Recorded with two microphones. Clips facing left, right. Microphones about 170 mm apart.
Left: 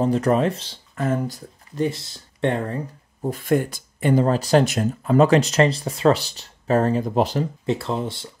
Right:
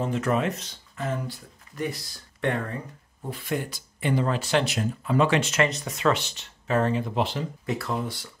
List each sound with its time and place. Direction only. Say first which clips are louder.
0.0 s speech: left 6 dB; 35° left (ahead or behind)
0.9 s speech: left 7 dB; 50° left (ahead or behind)
1.8 s speech: left 7 dB; 25° left (ahead or behind)
7.6 s speech: left 5 dB; 25° left (ahead or behind)